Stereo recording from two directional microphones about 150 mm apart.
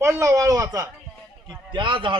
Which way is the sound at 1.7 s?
35° right (ahead or behind).